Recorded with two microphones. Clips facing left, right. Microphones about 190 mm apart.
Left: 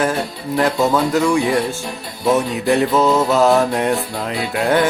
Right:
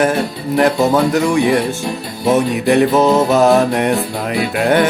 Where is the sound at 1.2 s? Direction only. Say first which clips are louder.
Right 2 dB; 20° right (ahead or behind).